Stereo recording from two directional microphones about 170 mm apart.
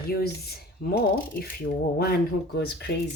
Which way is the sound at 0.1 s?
65° left (ahead or behind).